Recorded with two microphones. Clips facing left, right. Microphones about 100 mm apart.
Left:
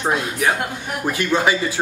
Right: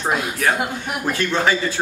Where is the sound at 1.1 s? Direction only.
15° left (ahead or behind).